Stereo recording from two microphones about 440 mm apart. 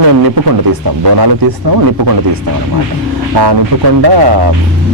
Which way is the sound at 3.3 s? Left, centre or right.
Right.